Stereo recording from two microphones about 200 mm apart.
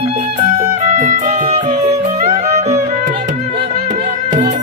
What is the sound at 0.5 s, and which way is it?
Music, 35° right (ahead or behind).